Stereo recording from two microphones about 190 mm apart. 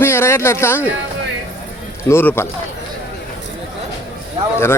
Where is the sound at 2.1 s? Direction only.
10° left (ahead or behind).